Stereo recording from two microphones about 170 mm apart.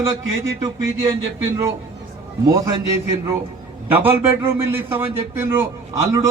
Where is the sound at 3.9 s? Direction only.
10° right (ahead or behind).